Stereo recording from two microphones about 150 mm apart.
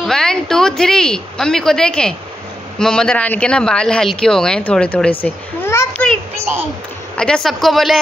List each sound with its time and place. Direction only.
0.0 s a woman's voice: 5° left (ahead or behind)
7.2 s speech: 5° left (ahead or behind)